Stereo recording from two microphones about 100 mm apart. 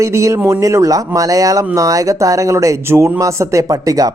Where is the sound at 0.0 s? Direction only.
30° right (ahead or behind).